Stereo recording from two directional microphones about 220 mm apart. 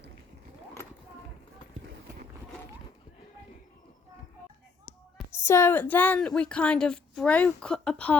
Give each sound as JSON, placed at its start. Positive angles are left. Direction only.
{"t": 5.3, "sound": "a woman's voice", "side_deg": 10}